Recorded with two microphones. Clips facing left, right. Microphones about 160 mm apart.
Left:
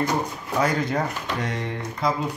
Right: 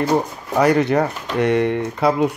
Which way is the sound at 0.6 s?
70° right (ahead or behind).